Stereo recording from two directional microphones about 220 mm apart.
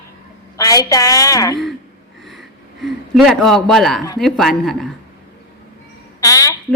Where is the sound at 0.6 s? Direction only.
15° left (ahead or behind).